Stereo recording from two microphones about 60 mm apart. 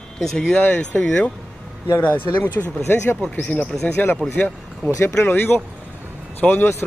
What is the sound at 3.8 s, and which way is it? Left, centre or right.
Speech, left.